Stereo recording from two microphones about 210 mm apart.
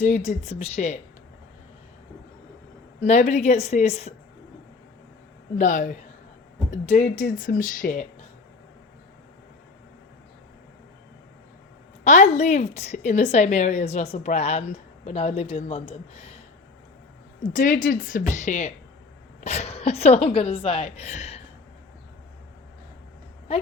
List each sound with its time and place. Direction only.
0.0 s a woman's voice: 35° left (ahead or behind)
3.0 s a woman's voice: 35° left (ahead or behind)
5.5 s a woman's voice: 40° left (ahead or behind)
12.0 s a woman's voice: 35° left (ahead or behind)
17.5 s a woman's voice: 40° left (ahead or behind)